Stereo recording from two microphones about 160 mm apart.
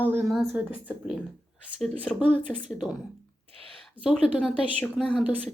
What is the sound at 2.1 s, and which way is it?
Speech, centre (ahead or behind).